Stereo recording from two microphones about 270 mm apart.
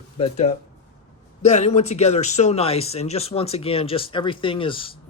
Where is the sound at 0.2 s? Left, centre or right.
Left.